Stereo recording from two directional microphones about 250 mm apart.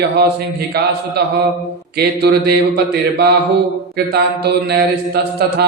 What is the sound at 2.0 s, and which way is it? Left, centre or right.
Mantra, right.